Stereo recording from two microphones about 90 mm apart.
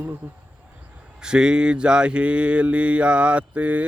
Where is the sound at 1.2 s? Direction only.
10° right (ahead or behind).